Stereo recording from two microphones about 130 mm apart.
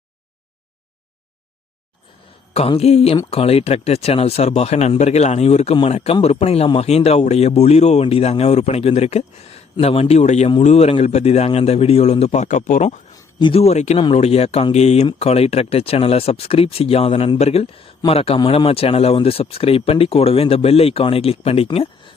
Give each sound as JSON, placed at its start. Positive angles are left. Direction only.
{"t": 2.5, "sound": "a man's voice", "side_deg": 50}
{"t": 13.4, "sound": "a man's voice", "side_deg": 50}